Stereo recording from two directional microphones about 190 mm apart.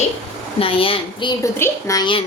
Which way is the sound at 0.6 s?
30° left (ahead or behind).